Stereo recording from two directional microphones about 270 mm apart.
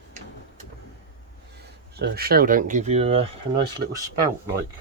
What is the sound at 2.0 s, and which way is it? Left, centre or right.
Speech, right.